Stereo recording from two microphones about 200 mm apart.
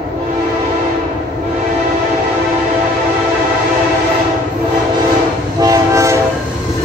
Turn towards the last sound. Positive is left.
turn(degrees=-15)  # may be behind; listen again after turning